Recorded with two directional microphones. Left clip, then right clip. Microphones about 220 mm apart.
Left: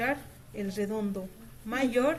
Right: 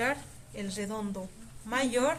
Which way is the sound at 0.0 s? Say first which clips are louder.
Even; 45° right (ahead or behind).